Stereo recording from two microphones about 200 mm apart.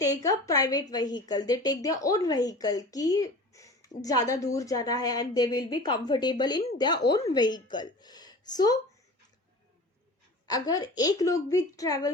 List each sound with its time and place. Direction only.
0.0 s a woman's voice: 15° left (ahead or behind)
10.4 s a woman's voice: 20° left (ahead or behind)